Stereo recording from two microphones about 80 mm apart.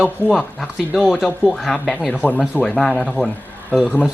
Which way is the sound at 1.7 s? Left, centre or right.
Centre.